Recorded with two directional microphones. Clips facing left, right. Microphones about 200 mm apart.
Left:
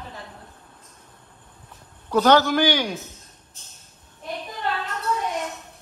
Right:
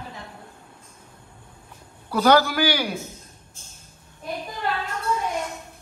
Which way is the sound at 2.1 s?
10° right (ahead or behind).